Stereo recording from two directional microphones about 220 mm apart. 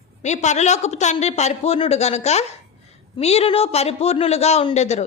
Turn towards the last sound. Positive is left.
turn(degrees=30)  # may be behind; listen again after turning